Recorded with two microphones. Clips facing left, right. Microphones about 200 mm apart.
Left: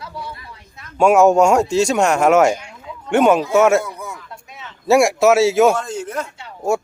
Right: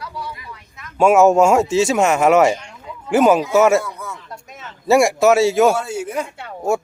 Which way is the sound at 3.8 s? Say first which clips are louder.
Left 1 dB; 15° left (ahead or behind).